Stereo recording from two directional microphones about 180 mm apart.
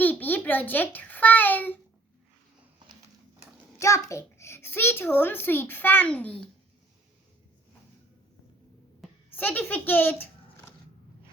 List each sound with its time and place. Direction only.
0.0 s a child's voice: 10° left (ahead or behind)
3.8 s a child's voice: 15° left (ahead or behind)
9.0 s speech: 10° left (ahead or behind)